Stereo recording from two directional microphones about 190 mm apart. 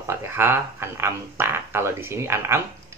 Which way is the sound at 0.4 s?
10° right (ahead or behind).